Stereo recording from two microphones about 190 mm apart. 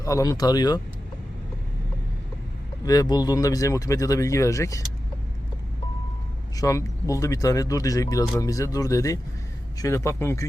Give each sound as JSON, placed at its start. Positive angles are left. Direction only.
{"t": 0.0, "sound": "speech", "side_deg": 15}
{"t": 2.8, "sound": "speech", "side_deg": 20}
{"t": 6.6, "sound": "speech", "side_deg": 15}